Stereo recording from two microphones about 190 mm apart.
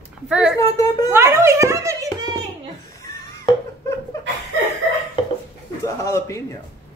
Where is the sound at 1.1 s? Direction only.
15° right (ahead or behind).